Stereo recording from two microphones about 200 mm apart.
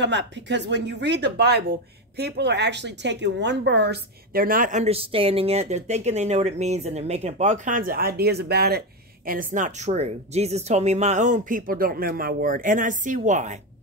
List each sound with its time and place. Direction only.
0.0 s speech: 60° right (ahead or behind); by 13.6 s 35° right (ahead or behind)